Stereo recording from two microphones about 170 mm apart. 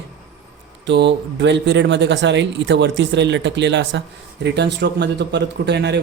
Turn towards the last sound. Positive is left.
turn(degrees=-85)